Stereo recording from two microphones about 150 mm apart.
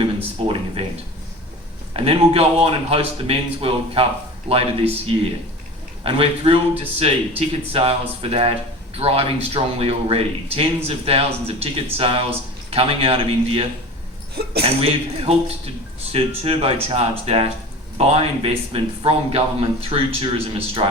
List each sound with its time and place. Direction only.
0.0 s speech: 40° right (ahead or behind)
1.9 s speech: 40° right (ahead or behind)